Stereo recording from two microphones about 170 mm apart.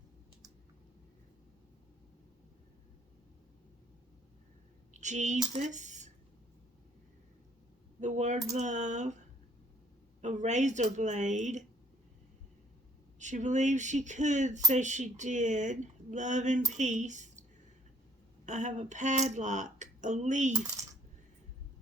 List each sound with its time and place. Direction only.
4.9 s speech: 45° right (ahead or behind)
8.0 s mechanisms: 45° right (ahead or behind)
8.5 s speech: 45° right (ahead or behind)
10.2 s speech: 45° right (ahead or behind)
13.1 s speech: 45° right (ahead or behind)
18.4 s speech: 45° right (ahead or behind)